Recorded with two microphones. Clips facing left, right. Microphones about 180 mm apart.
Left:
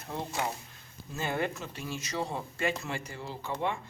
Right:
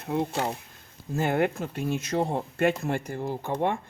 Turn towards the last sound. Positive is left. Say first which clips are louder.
# right 6 dB
turn(degrees=-55)  # may be behind; listen again after turning